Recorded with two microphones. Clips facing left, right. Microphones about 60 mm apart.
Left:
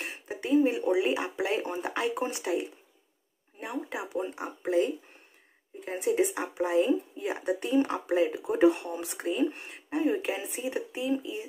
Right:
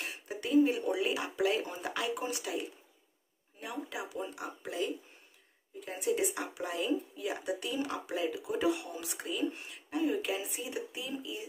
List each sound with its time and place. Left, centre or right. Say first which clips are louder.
0.0 s a sound: left 3 dB; left
3.5 s speech: left 5 dB; left
5.9 s speech: left 5 dB; left